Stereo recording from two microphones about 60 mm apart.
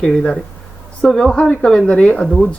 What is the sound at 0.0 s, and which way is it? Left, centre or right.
Speech, centre.